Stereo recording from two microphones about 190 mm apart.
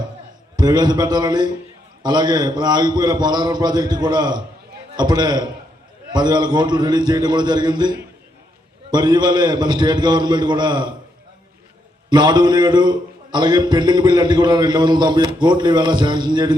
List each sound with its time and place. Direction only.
0.5 s a man's voice: 20° right (ahead or behind)
12.0 s a man's voice: 20° right (ahead or behind)